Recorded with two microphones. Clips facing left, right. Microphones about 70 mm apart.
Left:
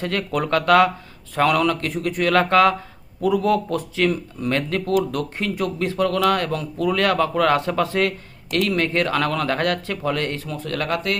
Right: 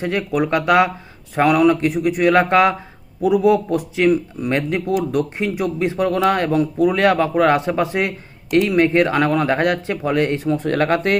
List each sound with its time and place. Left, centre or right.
0.0 s speech: centre